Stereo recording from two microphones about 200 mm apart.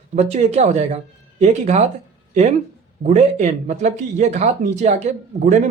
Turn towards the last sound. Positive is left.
turn(degrees=-35)  # may be behind; listen again after turning